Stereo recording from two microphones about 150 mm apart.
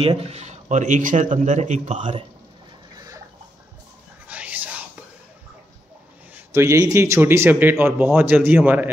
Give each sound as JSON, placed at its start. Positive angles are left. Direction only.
{"t": 0.0, "sound": "speech", "side_deg": -40}
{"t": 4.3, "sound": "whispering", "side_deg": -10}
{"t": 6.3, "sound": "a man's voice", "side_deg": -20}